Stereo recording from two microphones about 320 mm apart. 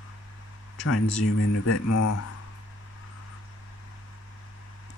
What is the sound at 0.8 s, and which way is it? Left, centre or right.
Speech, left.